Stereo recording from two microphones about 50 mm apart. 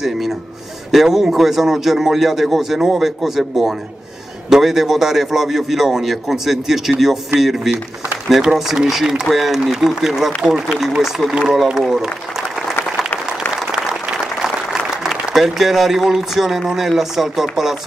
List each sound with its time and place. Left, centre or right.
0.9 s a man's voice: centre
14.2 s a man's voice: centre